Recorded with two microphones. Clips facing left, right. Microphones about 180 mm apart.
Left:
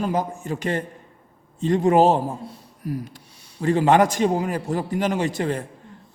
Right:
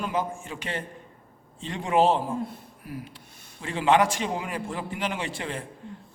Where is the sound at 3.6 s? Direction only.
40° left (ahead or behind).